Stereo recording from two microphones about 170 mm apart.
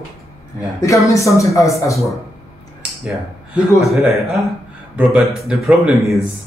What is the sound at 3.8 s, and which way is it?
Speech, centre (ahead or behind).